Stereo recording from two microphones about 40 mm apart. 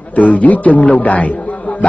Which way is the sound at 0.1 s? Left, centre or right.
Left.